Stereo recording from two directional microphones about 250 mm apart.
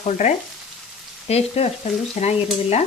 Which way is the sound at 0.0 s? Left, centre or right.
Left.